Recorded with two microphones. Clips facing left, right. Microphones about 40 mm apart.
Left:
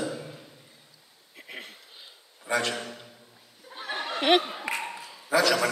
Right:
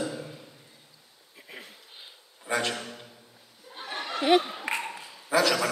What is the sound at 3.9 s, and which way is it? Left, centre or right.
Snicker, centre.